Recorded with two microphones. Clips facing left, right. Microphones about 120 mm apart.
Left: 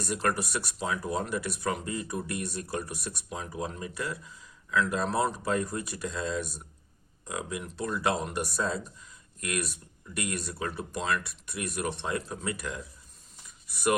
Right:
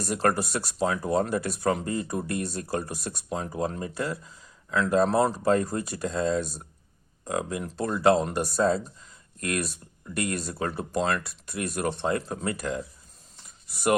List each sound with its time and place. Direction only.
0.0 s speech: 35° right (ahead or behind)